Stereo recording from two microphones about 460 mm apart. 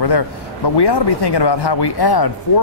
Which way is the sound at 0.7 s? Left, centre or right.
Left.